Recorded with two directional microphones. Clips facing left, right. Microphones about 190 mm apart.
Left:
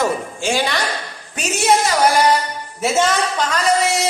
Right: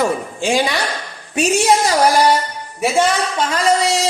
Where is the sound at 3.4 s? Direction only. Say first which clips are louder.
Right 3 dB; 30° right (ahead or behind).